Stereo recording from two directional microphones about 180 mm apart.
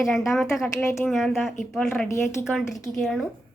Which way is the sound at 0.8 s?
15° left (ahead or behind).